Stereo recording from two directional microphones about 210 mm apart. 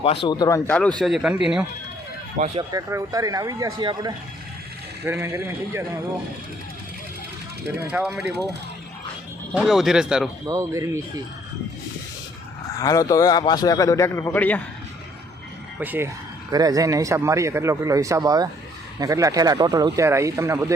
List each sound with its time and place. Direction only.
0.0 s speech: 25° left (ahead or behind)
0.9 s speech: centre (ahead or behind)
2.6 s a man's voice: 15° right (ahead or behind)
7.8 s speech: 5° right (ahead or behind)
9.5 s speech: centre (ahead or behind)
10.4 s a man's voice: 15° right (ahead or behind)
12.8 s a man's voice: 15° left (ahead or behind)
15.8 s a man's voice: 10° right (ahead or behind)